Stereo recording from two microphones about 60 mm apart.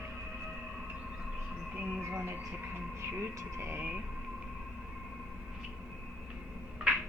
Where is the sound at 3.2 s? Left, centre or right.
Right.